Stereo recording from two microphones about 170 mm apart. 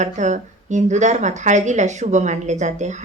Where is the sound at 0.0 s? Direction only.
45° right (ahead or behind).